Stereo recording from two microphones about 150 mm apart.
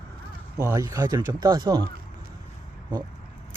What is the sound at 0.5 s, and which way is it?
Speech, 20° right (ahead or behind).